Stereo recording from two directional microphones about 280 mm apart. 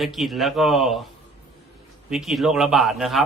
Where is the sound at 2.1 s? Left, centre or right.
Centre.